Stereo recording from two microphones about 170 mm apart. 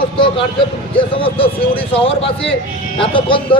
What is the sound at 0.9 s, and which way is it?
A man's voice, 30° left (ahead or behind).